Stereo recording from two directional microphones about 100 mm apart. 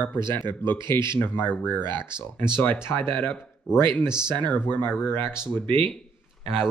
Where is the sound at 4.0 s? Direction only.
10° right (ahead or behind).